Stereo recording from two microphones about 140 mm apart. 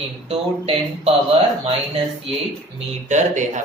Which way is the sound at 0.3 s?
45° right (ahead or behind).